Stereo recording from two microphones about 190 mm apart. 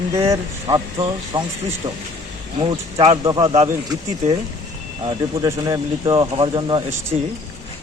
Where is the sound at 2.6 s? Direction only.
25° right (ahead or behind).